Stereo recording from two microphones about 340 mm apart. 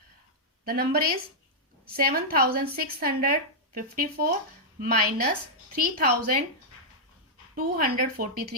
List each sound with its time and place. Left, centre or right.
0.6 s a woman's voice: right
7.5 s a woman's voice: right